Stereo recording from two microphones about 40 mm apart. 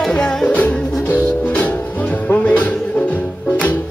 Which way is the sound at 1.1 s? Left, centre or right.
Left.